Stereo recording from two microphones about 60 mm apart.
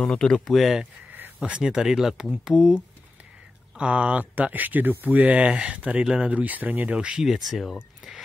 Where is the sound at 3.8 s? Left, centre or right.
Centre.